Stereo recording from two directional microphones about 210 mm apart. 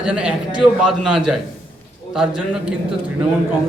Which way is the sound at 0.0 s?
5° right (ahead or behind).